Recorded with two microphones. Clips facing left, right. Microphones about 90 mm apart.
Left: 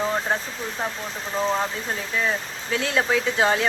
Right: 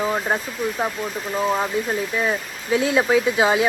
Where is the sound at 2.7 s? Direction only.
20° right (ahead or behind).